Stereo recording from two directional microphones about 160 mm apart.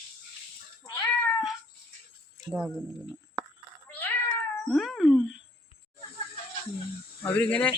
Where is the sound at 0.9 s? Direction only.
20° left (ahead or behind).